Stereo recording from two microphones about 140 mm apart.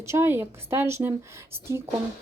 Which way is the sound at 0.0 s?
20° right (ahead or behind).